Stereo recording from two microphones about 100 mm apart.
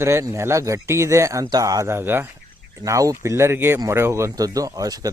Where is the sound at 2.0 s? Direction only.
20° right (ahead or behind).